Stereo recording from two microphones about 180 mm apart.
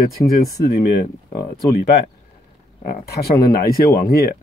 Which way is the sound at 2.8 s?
55° left (ahead or behind).